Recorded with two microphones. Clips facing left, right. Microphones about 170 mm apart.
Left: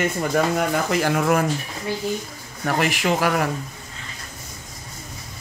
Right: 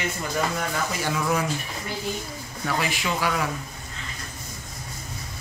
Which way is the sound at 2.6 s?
45° left (ahead or behind).